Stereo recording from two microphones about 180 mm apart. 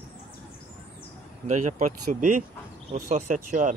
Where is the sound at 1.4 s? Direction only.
40° right (ahead or behind).